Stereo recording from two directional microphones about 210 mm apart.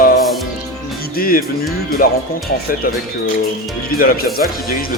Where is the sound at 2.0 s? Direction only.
45° left (ahead or behind).